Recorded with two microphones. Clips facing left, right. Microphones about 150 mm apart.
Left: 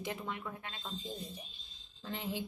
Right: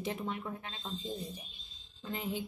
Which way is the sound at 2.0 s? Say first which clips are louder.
Right 2 dB; 5° right (ahead or behind).